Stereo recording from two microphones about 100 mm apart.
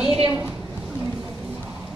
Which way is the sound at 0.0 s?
10° right (ahead or behind).